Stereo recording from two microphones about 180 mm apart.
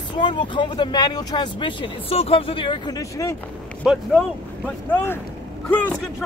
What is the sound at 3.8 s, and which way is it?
Speech, 5° right (ahead or behind).